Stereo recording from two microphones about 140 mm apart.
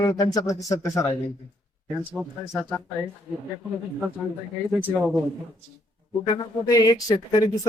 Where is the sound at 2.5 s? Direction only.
5° right (ahead or behind).